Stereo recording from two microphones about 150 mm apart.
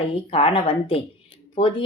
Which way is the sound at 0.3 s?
40° left (ahead or behind).